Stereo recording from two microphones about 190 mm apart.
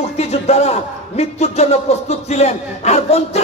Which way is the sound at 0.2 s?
35° left (ahead or behind).